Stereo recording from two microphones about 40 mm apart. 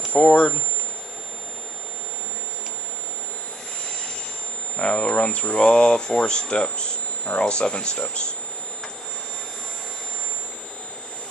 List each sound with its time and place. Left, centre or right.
0.1 s speech: left
4.7 s speech: left